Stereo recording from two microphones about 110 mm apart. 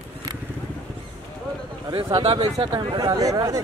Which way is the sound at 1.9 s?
50° right (ahead or behind).